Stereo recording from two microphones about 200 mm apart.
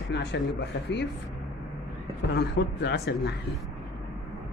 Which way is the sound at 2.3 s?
60° left (ahead or behind).